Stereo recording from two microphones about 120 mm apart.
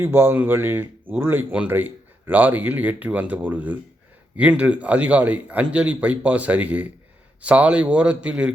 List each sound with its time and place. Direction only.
0.0 s speech: 20° right (ahead or behind)